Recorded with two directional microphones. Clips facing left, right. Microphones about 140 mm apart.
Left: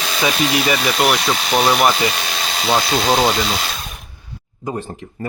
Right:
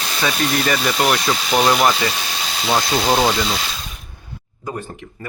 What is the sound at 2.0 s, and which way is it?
Ratchet, 70° left (ahead or behind).